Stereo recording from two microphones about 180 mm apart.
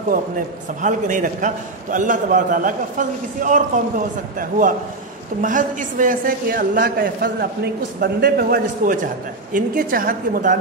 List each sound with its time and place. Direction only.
0.8 s a man's voice: 45° right (ahead or behind)